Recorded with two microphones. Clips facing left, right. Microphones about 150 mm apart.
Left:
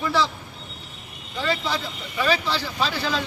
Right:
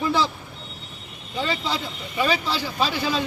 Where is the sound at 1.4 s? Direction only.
20° right (ahead or behind).